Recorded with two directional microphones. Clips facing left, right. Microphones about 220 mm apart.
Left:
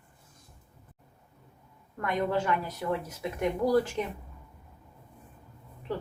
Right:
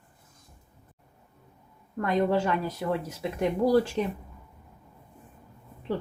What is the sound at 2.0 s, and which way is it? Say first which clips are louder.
Speech: right 4 dB; 30° right (ahead or behind).